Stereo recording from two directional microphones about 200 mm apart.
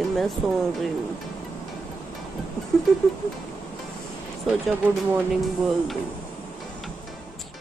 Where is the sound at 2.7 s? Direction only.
5° left (ahead or behind).